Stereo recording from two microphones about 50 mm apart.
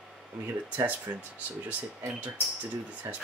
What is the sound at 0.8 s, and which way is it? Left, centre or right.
Speech, right.